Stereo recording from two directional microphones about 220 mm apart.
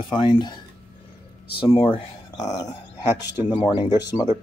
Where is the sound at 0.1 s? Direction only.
20° left (ahead or behind).